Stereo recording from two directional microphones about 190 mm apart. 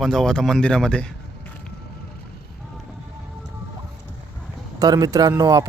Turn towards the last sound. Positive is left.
turn(degrees=-20)  # may be behind; listen again after turning